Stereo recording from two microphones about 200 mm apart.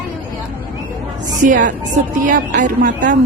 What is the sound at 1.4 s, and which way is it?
A woman's voice, 40° right (ahead or behind).